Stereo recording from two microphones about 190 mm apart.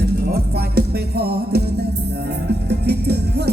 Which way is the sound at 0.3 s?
55° right (ahead or behind).